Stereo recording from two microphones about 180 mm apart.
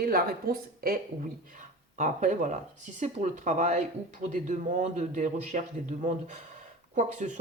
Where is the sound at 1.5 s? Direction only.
45° right (ahead or behind).